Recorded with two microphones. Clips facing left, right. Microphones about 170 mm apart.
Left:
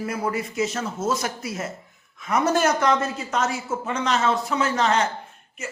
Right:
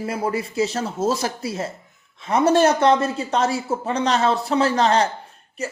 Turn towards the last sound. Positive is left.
turn(degrees=-35)  # may be behind; listen again after turning